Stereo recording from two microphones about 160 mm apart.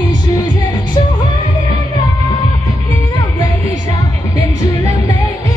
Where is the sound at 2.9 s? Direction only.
25° left (ahead or behind).